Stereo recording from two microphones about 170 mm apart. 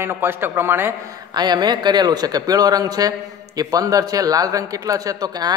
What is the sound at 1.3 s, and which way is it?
A man's voice, 25° right (ahead or behind).